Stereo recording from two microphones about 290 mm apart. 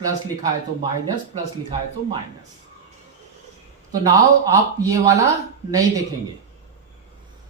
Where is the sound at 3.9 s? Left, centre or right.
Centre.